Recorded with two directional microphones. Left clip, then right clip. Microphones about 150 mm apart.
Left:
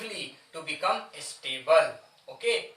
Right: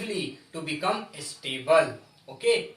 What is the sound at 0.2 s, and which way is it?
A woman's voice, centre (ahead or behind).